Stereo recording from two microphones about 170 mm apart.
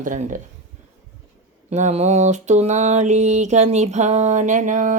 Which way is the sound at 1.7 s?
40° right (ahead or behind).